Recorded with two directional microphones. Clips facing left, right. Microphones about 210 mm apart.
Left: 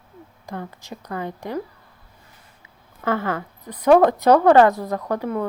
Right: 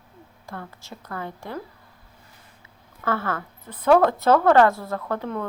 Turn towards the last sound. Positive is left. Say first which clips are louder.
# left 4 dB
turn(degrees=10)  # may be behind; listen again after turning